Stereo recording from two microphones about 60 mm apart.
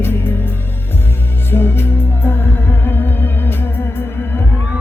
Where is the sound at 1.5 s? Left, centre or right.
Left.